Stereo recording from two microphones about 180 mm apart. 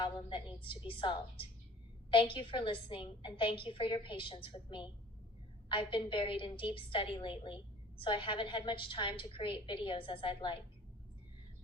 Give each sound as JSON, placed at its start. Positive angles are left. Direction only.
{"t": 0.0, "sound": "a woman's voice", "side_deg": 30}